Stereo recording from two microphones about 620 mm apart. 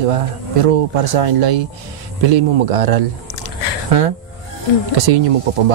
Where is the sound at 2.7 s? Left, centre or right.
Right.